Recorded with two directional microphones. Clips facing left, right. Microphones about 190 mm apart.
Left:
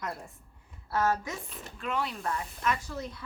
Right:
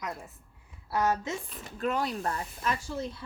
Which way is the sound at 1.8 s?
40° right (ahead or behind).